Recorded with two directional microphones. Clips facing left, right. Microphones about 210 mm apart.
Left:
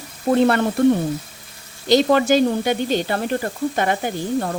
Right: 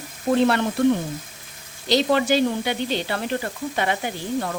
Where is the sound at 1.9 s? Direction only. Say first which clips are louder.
Left 4 dB; 50° left (ahead or behind).